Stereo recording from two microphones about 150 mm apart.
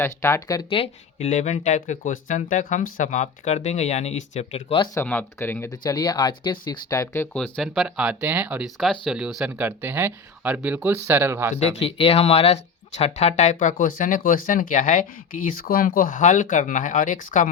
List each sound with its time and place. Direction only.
0.0 s speech: 15° left (ahead or behind)
0.7 s speech: 40° left (ahead or behind)
1.3 s speech: 55° left (ahead or behind)
4.9 s speech: 15° left (ahead or behind)
7.3 s speech: 5° left (ahead or behind); by 11.5 s 15° right (ahead or behind)
11.5 s speech: 45° left (ahead or behind); by 17.5 s 60° left (ahead or behind)